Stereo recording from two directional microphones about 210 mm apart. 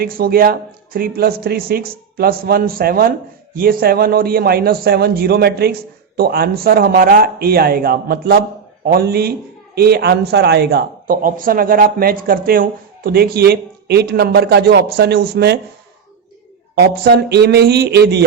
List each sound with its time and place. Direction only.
0.0 s speech: 45° right (ahead or behind)
16.8 s speech: 45° right (ahead or behind)